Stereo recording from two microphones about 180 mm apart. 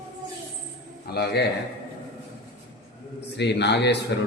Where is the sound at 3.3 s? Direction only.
70° left (ahead or behind).